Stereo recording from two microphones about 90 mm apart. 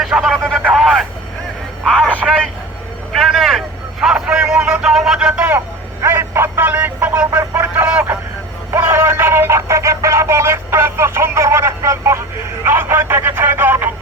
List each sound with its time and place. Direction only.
0.0 s speech: centre (ahead or behind)
1.9 s speech: 15° left (ahead or behind)
3.1 s a man's voice: centre (ahead or behind)
5.5 s speech: 25° right (ahead or behind)